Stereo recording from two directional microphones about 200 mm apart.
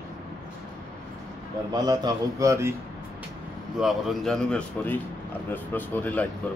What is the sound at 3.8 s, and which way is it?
A man's voice, centre (ahead or behind).